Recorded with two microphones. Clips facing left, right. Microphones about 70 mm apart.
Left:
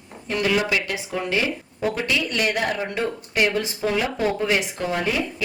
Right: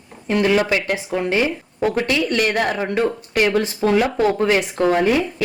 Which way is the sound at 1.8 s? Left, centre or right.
Right.